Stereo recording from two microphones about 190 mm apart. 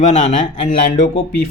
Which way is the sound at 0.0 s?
40° left (ahead or behind).